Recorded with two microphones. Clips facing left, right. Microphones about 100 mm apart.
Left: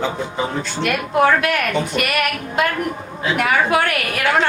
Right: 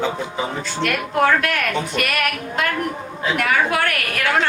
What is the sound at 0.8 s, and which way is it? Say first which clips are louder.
A woman's voice: left 2 dB; 10° left (ahead or behind).